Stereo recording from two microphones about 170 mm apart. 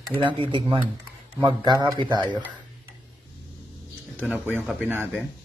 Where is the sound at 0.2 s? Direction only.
30° right (ahead or behind).